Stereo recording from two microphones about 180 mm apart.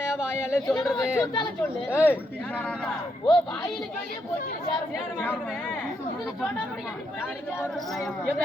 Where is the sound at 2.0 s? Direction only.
5° left (ahead or behind).